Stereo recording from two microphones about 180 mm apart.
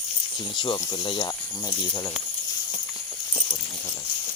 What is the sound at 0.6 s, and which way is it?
Speech, 25° left (ahead or behind).